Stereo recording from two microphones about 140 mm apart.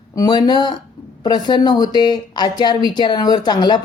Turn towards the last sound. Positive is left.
turn(degrees=30)  # may be behind; listen again after turning